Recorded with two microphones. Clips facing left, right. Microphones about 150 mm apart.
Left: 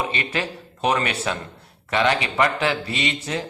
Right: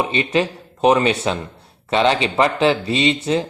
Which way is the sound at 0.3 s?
25° right (ahead or behind).